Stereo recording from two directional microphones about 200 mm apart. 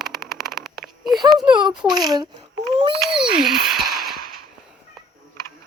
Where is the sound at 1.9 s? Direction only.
20° right (ahead or behind).